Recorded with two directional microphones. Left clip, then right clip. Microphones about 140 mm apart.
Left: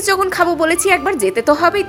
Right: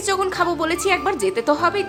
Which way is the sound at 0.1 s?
25° left (ahead or behind).